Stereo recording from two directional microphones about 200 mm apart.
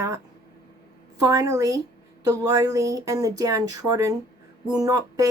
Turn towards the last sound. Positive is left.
turn(degrees=-20)  # may be behind; listen again after turning